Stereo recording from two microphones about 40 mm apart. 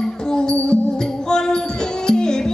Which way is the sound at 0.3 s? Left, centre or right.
Left.